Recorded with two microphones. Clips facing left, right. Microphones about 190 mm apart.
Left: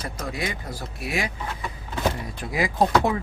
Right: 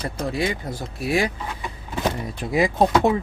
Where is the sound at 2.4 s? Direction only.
25° right (ahead or behind).